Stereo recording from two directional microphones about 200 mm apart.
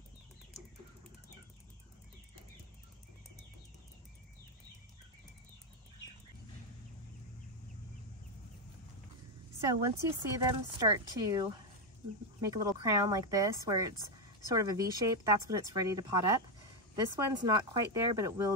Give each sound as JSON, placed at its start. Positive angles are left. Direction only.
{"t": 9.6, "sound": "a woman's voice", "side_deg": -15}